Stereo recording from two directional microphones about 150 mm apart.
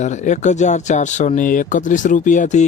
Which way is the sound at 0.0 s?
50° left (ahead or behind).